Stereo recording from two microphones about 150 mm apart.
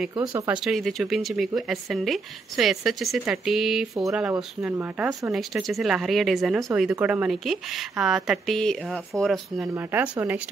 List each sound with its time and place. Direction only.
0.5 s speech: centre (ahead or behind)
4.3 s speech: 15° right (ahead or behind)
5.3 s speech: centre (ahead or behind)
9.9 s speech: 10° right (ahead or behind)